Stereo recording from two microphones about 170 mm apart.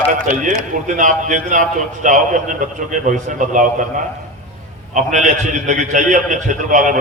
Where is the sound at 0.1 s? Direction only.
50° right (ahead or behind).